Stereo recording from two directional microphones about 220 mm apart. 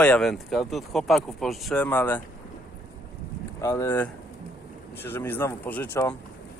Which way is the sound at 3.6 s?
15° left (ahead or behind).